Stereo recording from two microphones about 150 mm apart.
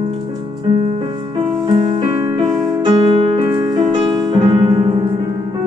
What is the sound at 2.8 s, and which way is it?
Music, 35° right (ahead or behind).